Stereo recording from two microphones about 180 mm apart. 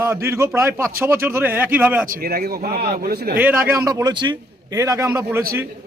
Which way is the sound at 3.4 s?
15° right (ahead or behind).